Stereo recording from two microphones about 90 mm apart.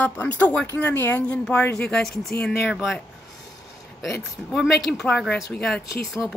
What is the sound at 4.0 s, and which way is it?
Speech, centre (ahead or behind).